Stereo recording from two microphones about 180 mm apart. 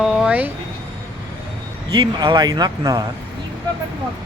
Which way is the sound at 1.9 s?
25° right (ahead or behind).